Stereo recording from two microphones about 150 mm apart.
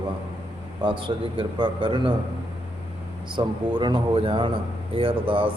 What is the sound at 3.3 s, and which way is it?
Speech, 30° right (ahead or behind).